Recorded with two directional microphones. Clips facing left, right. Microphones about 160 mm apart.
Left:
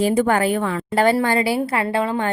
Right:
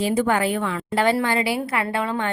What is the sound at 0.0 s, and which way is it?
A woman's voice, 45° left (ahead or behind).